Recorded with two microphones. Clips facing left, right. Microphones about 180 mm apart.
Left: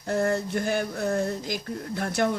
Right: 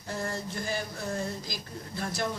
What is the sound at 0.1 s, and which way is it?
Speech, 60° left (ahead or behind).